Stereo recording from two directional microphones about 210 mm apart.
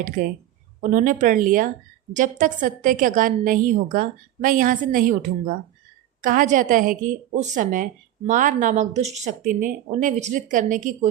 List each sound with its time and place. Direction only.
0.2 s a woman's voice: 40° right (ahead or behind)